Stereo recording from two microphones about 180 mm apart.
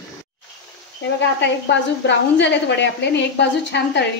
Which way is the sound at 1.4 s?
80° left.